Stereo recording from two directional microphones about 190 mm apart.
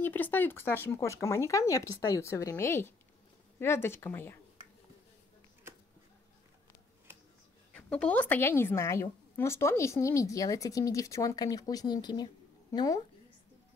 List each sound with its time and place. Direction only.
0.0 s a woman's voice: 10° left (ahead or behind)
7.7 s a woman's voice: 5° left (ahead or behind)